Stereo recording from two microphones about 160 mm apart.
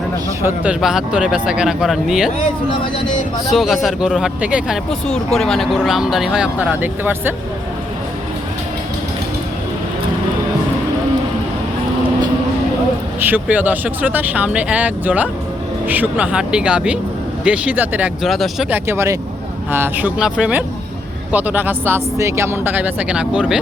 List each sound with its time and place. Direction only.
0.4 s speech: 5° right (ahead or behind)
3.5 s speech: centre (ahead or behind)
13.1 s speech: 10° right (ahead or behind)
18.7 s speech: 15° right (ahead or behind)